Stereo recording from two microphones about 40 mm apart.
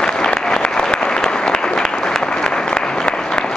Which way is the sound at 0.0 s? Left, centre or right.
Centre.